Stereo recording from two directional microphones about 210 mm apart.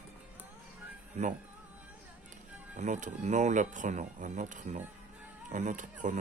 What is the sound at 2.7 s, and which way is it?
Speech, 35° right (ahead or behind).